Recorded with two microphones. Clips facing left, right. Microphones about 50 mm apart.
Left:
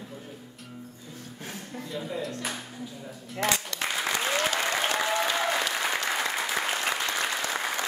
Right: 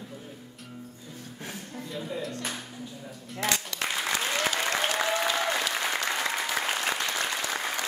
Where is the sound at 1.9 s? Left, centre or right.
Centre.